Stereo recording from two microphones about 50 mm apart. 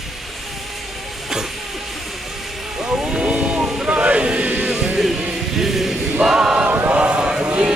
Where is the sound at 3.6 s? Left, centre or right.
Centre.